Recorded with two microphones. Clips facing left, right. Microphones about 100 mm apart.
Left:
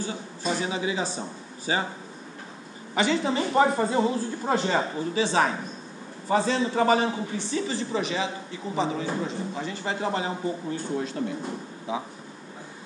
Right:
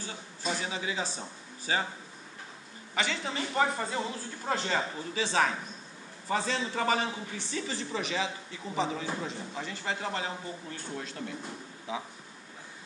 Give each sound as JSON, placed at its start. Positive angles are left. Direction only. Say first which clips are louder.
{"t": 0.4, "sound": "a man's voice", "louder": "left 6 dB", "side_deg": 5}
{"t": 2.9, "sound": "speech", "louder": "left 9 dB", "side_deg": 20}
{"t": 4.6, "sound": "a man's voice", "louder": "left 6 dB", "side_deg": 15}
{"t": 6.6, "sound": "speech", "louder": "left 8 dB", "side_deg": 20}
{"t": 6.9, "sound": "a man's voice", "louder": "left 7 dB", "side_deg": 5}
{"t": 9.9, "sound": "a man's voice", "louder": "left 7 dB", "side_deg": 15}